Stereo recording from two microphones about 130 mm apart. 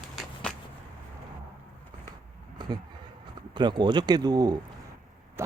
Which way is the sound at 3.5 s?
35° right (ahead or behind).